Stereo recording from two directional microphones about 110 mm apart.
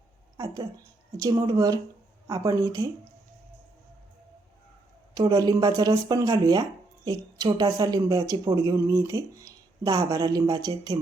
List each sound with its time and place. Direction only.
0.3 s a sound: 35° right (ahead or behind)
1.1 s speech: 35° right (ahead or behind)
5.1 s speech: 35° right (ahead or behind)